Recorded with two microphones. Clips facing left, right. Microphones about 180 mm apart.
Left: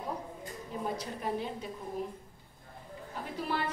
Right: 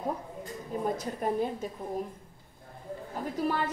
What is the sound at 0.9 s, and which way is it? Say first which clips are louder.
Speech: right 5 dB; 45° right (ahead or behind).